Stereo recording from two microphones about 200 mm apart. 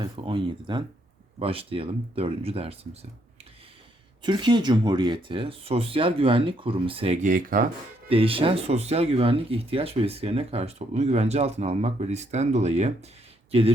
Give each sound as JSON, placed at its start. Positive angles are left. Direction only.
{"t": 0.0, "sound": "speech", "side_deg": -25}
{"t": 4.2, "sound": "speech", "side_deg": -25}
{"t": 8.1, "sound": "speech", "side_deg": -25}